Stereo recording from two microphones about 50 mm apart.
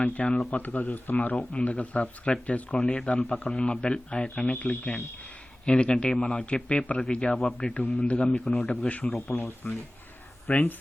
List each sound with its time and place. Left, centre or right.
0.0 s a man's voice: left
2.7 s a man's voice: centre
8.4 s a man's voice: centre
9.6 s speech: left